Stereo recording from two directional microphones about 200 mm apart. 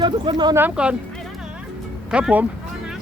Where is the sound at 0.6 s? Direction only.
5° right (ahead or behind).